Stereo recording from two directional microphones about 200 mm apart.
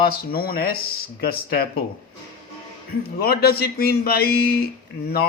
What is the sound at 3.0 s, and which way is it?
Speech, 50° left (ahead or behind).